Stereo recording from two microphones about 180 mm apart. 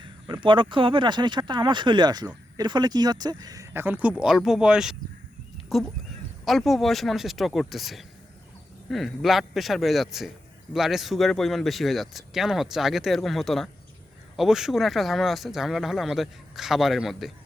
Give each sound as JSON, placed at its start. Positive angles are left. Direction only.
{"t": 0.0, "sound": "speech", "side_deg": -25}
{"t": 6.4, "sound": "speech", "side_deg": 0}